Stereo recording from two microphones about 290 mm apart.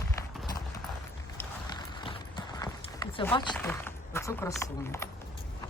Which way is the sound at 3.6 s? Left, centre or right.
Centre.